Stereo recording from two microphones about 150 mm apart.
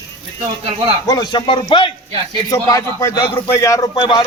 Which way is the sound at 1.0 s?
30° left (ahead or behind).